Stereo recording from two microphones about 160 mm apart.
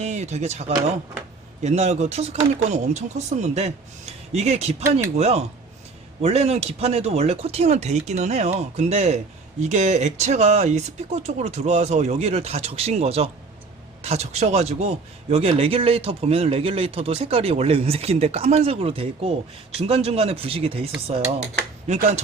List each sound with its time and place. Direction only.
0.0 s speech: 45° right (ahead or behind)
1.6 s speech: 45° right (ahead or behind)
4.8 s speech: 15° right (ahead or behind)
5.1 s speech: 40° right (ahead or behind)
21.8 s speech: 45° right (ahead or behind)